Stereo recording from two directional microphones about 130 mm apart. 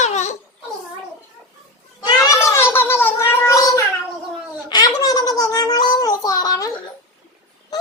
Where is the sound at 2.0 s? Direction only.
25° left (ahead or behind).